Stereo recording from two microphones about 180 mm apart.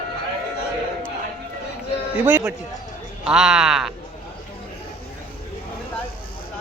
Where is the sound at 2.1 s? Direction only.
10° right (ahead or behind).